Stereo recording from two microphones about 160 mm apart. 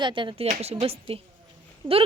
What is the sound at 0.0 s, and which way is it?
A child's voice, 30° right (ahead or behind).